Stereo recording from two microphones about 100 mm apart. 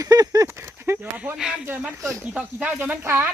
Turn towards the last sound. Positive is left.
turn(degrees=-20)  # may be behind; listen again after turning